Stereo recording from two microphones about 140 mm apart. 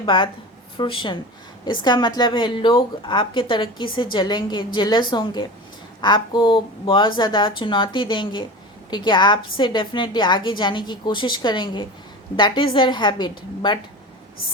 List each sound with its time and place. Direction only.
0.0 s a woman's voice: 35° left (ahead or behind)